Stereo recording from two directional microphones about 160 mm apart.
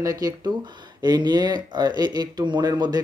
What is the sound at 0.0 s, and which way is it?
Speech, 20° right (ahead or behind).